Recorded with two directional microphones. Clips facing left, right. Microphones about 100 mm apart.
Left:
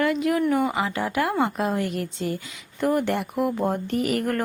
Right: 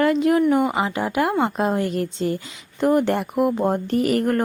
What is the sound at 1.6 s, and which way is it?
A woman's voice, 30° right (ahead or behind).